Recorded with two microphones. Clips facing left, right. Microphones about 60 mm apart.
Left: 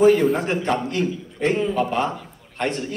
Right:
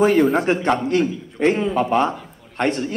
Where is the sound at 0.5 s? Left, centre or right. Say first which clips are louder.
Right 4 dB; right.